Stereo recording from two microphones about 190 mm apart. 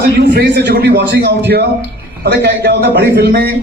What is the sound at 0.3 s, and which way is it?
A man's voice, 60° right (ahead or behind).